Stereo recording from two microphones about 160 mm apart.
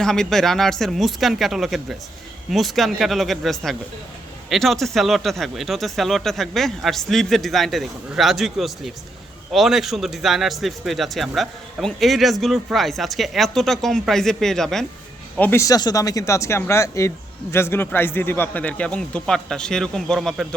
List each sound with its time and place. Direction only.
0.0 s a man's voice: 5° left (ahead or behind)
15.4 s a man's voice: 15° left (ahead or behind); by 20.5 s centre (ahead or behind)